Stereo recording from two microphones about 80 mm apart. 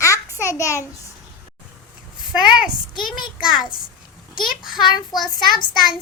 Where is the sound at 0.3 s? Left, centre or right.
Left.